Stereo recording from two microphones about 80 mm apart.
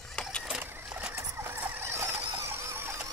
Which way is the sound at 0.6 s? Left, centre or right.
Right.